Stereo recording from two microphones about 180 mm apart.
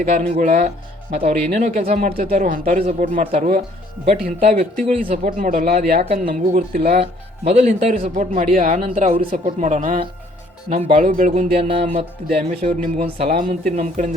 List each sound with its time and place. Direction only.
0.0 s speech: 45° right (ahead or behind)
4.9 s speech: 35° right (ahead or behind)
5.4 s a man's voice: 50° right (ahead or behind)
7.0 s speech: 35° right (ahead or behind)
11.7 s speech: 35° right (ahead or behind)